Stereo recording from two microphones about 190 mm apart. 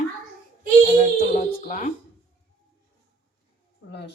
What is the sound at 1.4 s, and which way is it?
Speech, 40° left (ahead or behind).